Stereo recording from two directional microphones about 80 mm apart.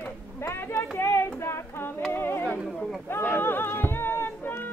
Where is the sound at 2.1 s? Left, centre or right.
Left.